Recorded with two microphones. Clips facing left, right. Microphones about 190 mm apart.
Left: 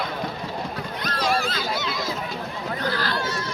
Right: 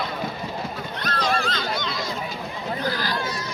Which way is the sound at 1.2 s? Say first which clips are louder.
Left 1 dB; 5° left (ahead or behind).